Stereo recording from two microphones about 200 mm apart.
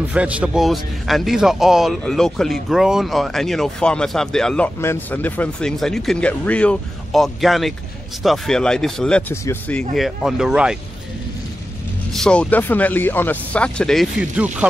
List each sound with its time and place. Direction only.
0.1 s a man's voice: 5° right (ahead or behind); by 9.8 s 10° left (ahead or behind)
9.9 s a man's voice: centre (ahead or behind)
12.1 s speech: 5° left (ahead or behind)